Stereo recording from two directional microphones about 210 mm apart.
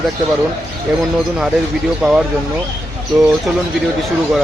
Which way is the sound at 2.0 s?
Centre (ahead or behind).